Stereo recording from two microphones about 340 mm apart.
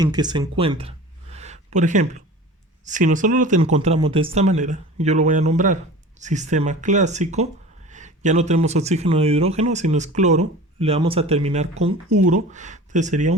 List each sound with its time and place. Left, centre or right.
0.0 s speech: centre